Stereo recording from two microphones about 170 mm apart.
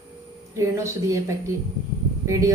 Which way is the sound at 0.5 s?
15° right (ahead or behind).